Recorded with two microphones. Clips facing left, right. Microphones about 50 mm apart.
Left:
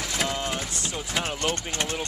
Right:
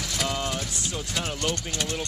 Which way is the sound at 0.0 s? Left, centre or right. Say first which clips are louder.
Left 1 dB; left.